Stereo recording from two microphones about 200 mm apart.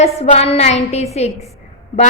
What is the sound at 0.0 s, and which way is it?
A woman's voice, 35° left (ahead or behind).